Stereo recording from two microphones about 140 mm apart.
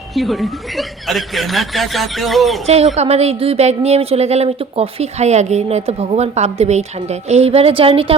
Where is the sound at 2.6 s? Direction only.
50° right (ahead or behind).